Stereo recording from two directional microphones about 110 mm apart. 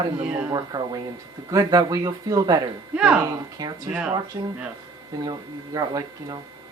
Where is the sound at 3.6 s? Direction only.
35° right (ahead or behind).